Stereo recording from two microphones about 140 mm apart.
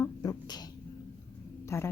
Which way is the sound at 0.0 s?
25° left (ahead or behind).